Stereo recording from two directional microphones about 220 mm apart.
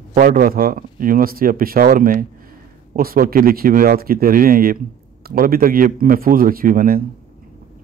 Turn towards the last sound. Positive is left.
turn(degrees=-40)  # may be behind; listen again after turning